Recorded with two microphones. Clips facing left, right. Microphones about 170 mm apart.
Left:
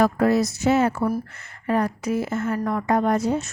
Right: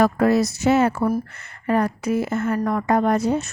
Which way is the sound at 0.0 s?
70° right (ahead or behind).